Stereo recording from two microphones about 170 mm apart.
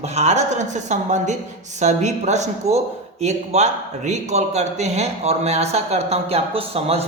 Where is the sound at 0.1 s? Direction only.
40° right (ahead or behind).